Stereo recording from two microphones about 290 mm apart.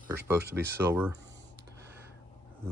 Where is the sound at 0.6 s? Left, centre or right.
Centre.